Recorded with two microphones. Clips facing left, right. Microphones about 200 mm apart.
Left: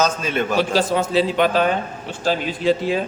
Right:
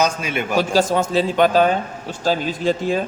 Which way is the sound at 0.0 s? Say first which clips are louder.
Left 1 dB; 10° right (ahead or behind).